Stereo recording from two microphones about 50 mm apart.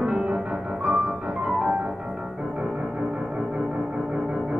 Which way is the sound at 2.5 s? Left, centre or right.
Centre.